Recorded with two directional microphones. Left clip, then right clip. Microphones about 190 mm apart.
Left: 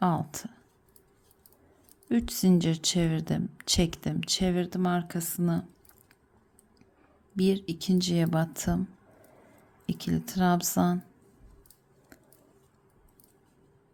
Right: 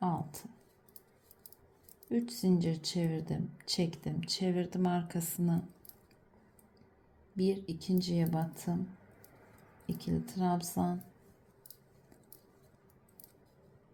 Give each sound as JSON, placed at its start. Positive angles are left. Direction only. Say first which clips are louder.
{"t": 0.0, "sound": "a sound", "louder": "left 8 dB", "side_deg": 30}
{"t": 2.0, "sound": "speech", "louder": "left 6 dB", "side_deg": 35}
{"t": 7.3, "sound": "speech", "louder": "left 6 dB", "side_deg": 30}
{"t": 9.8, "sound": "speech", "louder": "left 5 dB", "side_deg": 30}